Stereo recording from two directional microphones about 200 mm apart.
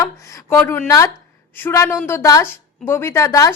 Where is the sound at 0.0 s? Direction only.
15° left (ahead or behind).